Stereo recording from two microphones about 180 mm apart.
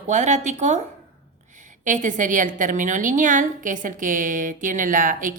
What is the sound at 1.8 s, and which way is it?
A woman's voice, 45° right (ahead or behind).